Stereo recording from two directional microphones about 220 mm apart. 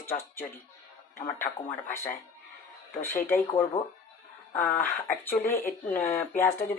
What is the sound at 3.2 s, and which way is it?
Speech, 10° left (ahead or behind).